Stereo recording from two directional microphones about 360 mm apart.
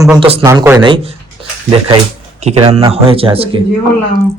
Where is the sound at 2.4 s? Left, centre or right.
Centre.